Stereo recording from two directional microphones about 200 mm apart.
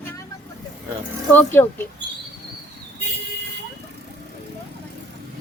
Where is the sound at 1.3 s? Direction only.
10° left (ahead or behind).